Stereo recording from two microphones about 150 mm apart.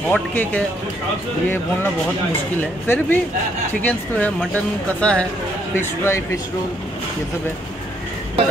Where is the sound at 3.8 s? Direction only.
10° left (ahead or behind).